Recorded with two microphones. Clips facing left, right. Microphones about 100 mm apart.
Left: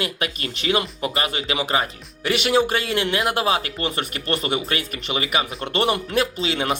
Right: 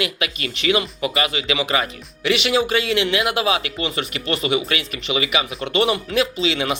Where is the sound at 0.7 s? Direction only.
40° left (ahead or behind).